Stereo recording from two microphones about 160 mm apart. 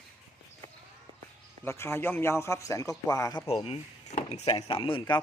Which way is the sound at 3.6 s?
45° left (ahead or behind).